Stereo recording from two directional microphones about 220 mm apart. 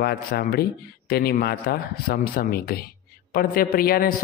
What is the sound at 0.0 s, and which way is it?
A man's voice, 45° left (ahead or behind).